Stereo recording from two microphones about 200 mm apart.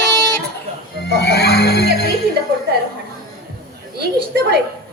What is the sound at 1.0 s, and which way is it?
Music, 55° left (ahead or behind).